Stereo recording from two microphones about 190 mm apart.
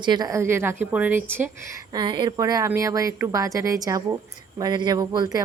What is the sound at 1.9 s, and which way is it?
A woman's voice, 25° right (ahead or behind).